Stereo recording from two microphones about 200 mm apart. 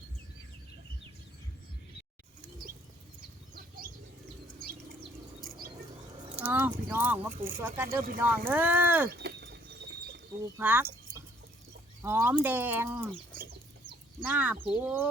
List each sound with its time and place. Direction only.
6.3 s speech: 10° right (ahead or behind)
9.0 s a sound: 55° right (ahead or behind)
10.6 s speech: 10° right (ahead or behind)
12.0 s speech: 10° right (ahead or behind)
14.2 s speech: 10° right (ahead or behind)